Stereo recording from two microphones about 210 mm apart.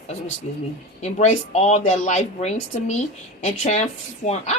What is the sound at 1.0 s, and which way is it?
Speech, 30° left (ahead or behind).